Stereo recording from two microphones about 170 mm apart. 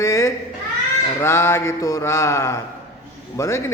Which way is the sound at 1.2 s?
15° left (ahead or behind).